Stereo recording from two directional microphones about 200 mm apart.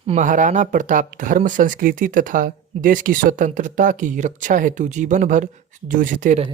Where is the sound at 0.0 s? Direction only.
35° right (ahead or behind).